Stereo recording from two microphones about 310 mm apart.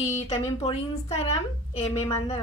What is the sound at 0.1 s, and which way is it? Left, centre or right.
Speech, centre.